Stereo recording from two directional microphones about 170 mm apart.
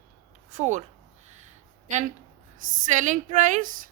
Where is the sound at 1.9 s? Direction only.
45° right (ahead or behind).